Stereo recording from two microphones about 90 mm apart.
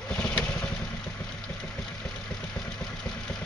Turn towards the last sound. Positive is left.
turn(degrees=5)  # may be behind; listen again after turning